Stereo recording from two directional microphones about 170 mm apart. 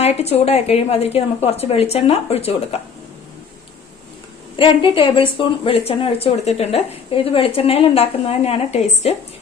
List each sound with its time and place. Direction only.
0.0 s speech: 40° left (ahead or behind)
4.5 s speech: 30° left (ahead or behind)